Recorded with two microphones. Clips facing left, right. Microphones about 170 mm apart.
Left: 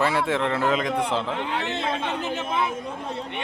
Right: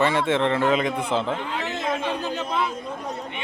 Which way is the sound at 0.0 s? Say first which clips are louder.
Right 2 dB; centre (ahead or behind).